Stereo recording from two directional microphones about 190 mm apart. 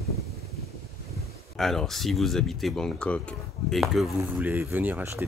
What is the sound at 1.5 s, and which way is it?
Speech, centre (ahead or behind).